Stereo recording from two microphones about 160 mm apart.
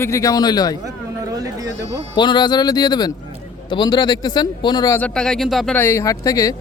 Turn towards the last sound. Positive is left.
turn(degrees=20)  # may be behind; listen again after turning